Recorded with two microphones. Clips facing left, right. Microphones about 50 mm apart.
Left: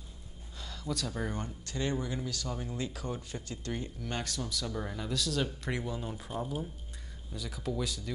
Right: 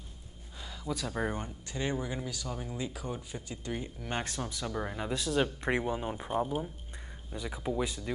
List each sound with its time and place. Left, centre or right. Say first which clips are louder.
0.6 s a sound: even; centre
1.1 s speech: right 3 dB; right
4.1 s speech: right 2 dB; right